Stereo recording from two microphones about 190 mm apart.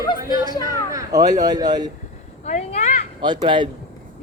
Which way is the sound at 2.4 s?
35° left (ahead or behind).